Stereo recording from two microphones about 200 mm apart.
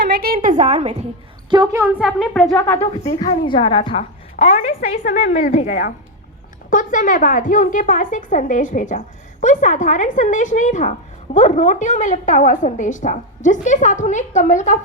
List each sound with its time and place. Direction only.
0.0 s a sound: 55° right (ahead or behind)
0.6 s a woman's voice: 35° right (ahead or behind)
1.5 s a woman's voice: 20° right (ahead or behind)
2.0 s speech: centre (ahead or behind)
2.7 s a woman's voice: 25° left (ahead or behind)